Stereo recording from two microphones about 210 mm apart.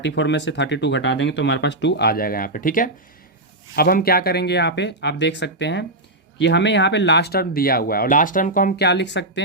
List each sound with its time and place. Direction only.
0.0 s speech: 60° left (ahead or behind)